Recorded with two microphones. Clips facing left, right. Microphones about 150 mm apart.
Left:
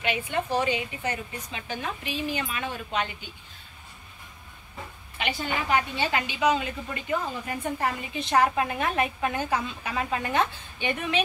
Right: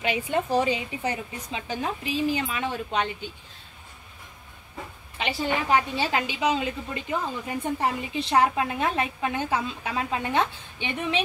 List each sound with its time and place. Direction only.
0.0 s a woman's voice: 35° right (ahead or behind)
5.1 s a woman's voice: 30° right (ahead or behind)